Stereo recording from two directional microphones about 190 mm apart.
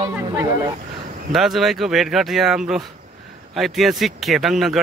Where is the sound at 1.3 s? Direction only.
Centre (ahead or behind).